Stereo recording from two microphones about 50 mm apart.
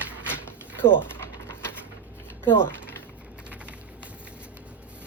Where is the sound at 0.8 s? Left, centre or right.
Left.